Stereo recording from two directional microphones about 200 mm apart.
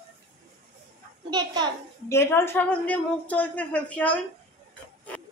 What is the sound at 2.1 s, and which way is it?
A woman's voice, 10° left (ahead or behind).